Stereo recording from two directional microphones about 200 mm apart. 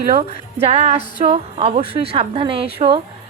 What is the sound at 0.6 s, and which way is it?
A woman's voice, 30° right (ahead or behind).